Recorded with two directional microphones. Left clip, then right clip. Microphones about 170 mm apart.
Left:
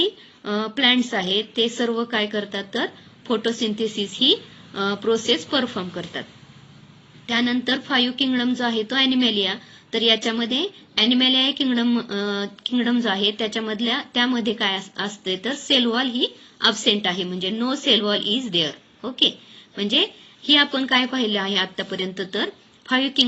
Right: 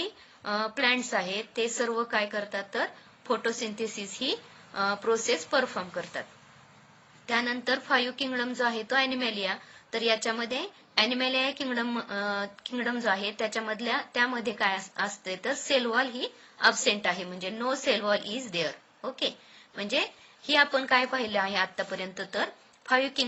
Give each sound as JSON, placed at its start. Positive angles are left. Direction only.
{"t": 0.4, "sound": "a woman's voice", "side_deg": -50}
{"t": 7.3, "sound": "a woman's voice", "side_deg": -50}